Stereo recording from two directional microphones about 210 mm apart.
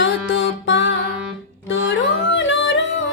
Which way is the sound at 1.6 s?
60° left (ahead or behind).